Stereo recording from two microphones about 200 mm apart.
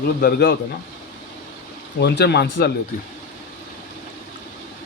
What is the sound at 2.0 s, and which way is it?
Speech, 55° left (ahead or behind).